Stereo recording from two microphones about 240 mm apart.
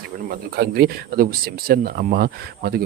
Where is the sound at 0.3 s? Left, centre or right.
Right.